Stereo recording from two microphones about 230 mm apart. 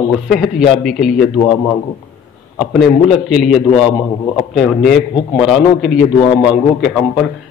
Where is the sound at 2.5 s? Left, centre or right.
Centre.